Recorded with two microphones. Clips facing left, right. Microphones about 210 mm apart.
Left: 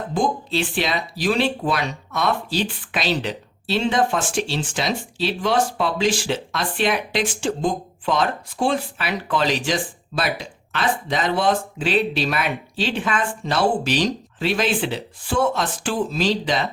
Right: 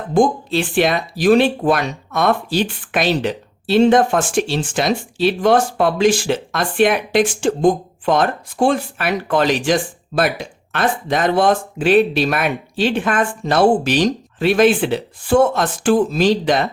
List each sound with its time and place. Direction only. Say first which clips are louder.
0.1 s speech: right 8 dB; 50° right (ahead or behind)